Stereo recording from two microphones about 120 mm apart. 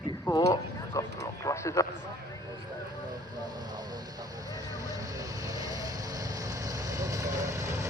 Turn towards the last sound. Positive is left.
turn(degrees=-25)  # may be behind; listen again after turning